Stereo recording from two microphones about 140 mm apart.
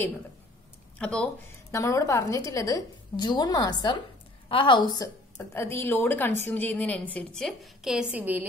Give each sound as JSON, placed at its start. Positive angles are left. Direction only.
{"t": 0.9, "sound": "speech", "side_deg": 10}
{"t": 1.7, "sound": "a woman's voice", "side_deg": 20}